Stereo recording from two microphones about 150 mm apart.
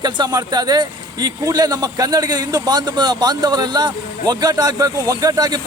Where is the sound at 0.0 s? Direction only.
25° right (ahead or behind).